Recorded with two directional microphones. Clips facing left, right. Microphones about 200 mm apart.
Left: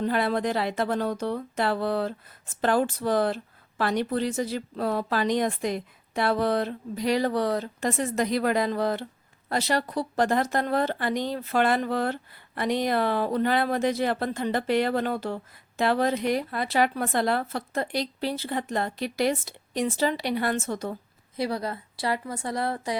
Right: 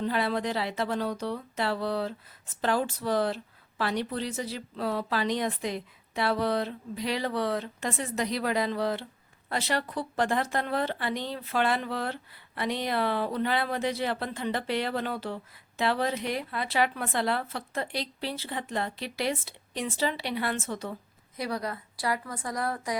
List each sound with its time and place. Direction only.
0.0 s speech: 50° left (ahead or behind)
21.3 s a woman's voice: 25° left (ahead or behind)